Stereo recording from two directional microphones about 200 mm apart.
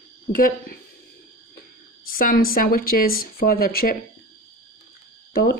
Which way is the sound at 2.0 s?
45° left (ahead or behind).